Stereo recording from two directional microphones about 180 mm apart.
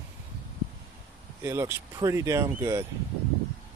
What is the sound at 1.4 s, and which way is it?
Speech, 15° right (ahead or behind).